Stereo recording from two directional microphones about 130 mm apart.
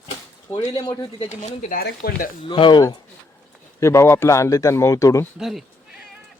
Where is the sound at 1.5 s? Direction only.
75° left (ahead or behind).